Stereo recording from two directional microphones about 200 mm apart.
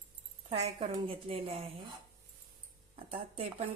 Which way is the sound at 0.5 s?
30° right (ahead or behind).